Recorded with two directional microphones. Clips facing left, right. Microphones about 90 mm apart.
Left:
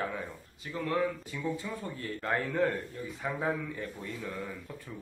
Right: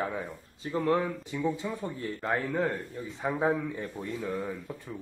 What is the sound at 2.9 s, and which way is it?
Speech, 25° right (ahead or behind).